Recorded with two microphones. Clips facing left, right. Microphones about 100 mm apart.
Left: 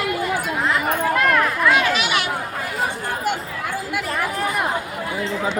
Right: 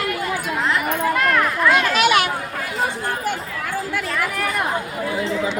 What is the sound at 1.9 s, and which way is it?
Chatter, 50° right (ahead or behind).